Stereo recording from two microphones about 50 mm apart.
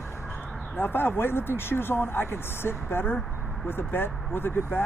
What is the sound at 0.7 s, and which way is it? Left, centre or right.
Speech, left.